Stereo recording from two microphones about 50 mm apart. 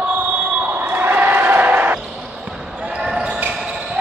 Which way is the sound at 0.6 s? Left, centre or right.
Right.